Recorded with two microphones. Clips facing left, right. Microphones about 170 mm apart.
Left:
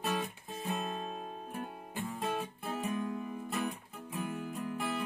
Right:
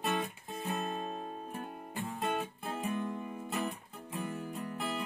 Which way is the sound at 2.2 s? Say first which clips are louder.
Right 2 dB; centre (ahead or behind).